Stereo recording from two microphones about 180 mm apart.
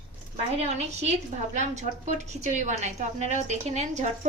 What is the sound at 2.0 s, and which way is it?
A woman's voice, 40° right (ahead or behind).